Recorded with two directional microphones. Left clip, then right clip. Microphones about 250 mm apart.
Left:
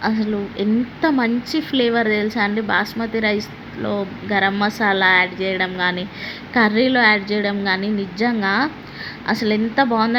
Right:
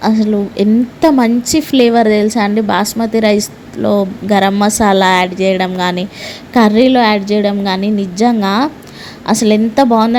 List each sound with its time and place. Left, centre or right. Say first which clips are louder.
0.0 s a woman's voice: right 8 dB; right